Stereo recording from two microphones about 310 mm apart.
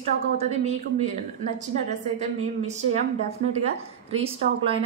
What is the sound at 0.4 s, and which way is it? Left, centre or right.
A woman's voice, right.